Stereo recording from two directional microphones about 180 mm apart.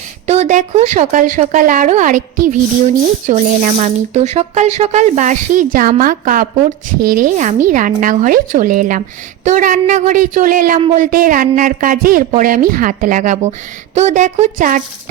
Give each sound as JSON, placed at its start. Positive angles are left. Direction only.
{"t": 0.3, "sound": "a woman's voice", "side_deg": -40}